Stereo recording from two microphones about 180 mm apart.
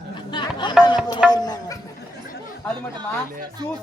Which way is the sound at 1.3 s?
20° left (ahead or behind).